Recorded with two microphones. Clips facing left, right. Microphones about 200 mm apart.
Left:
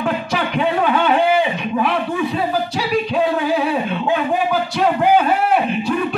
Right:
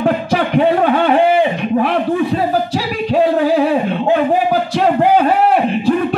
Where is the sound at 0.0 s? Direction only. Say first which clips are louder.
Right 5 dB; 55° right (ahead or behind).